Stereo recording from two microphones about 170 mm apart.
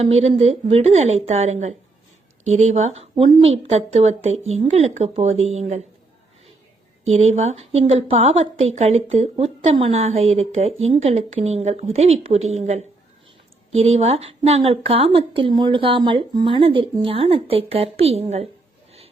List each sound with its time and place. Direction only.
0.0 s a woman's voice: 40° right (ahead or behind)
7.1 s a woman's voice: 40° right (ahead or behind)